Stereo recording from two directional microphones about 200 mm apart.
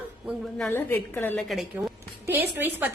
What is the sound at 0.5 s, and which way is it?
Speech, 10° left (ahead or behind).